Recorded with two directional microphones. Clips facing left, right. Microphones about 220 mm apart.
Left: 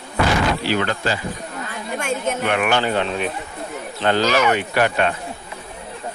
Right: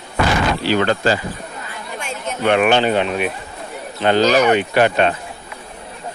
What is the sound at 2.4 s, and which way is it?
Speech, 25° right (ahead or behind).